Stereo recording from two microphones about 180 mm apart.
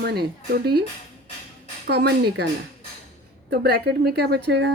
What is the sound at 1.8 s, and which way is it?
Speech, 65° right (ahead or behind).